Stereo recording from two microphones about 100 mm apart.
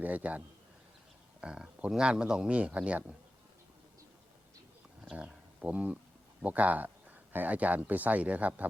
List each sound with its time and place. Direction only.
0.0 s speech: 15° right (ahead or behind)
5.1 s speech: 15° right (ahead or behind)